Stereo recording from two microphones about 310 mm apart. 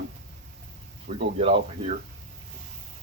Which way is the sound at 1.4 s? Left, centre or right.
Centre.